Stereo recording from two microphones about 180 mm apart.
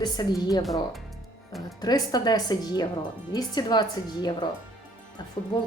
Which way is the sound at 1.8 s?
20° left (ahead or behind).